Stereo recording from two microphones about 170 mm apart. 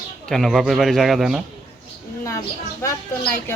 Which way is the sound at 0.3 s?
Centre (ahead or behind).